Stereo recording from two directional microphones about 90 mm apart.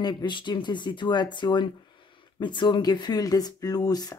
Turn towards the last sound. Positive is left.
turn(degrees=45)  # may be behind; listen again after turning